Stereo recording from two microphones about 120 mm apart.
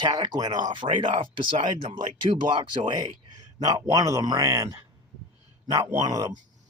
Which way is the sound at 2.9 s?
35° right (ahead or behind).